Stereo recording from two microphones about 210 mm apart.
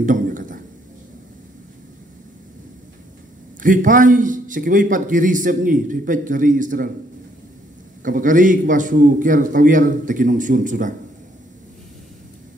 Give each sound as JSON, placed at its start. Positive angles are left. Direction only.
{"t": 0.0, "sound": "a sound", "side_deg": -40}
{"t": 3.6, "sound": "a man's voice", "side_deg": -40}
{"t": 8.0, "sound": "a man's voice", "side_deg": -40}